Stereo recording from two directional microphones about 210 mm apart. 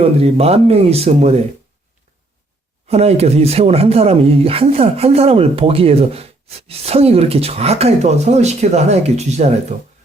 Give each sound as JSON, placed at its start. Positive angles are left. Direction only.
{"t": 0.0, "sound": "speech", "side_deg": -30}
{"t": 2.9, "sound": "speech", "side_deg": -30}